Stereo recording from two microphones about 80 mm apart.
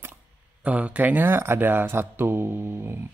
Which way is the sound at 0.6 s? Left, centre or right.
Centre.